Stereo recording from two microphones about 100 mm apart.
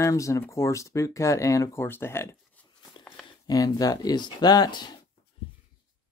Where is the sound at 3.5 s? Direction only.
40° left (ahead or behind).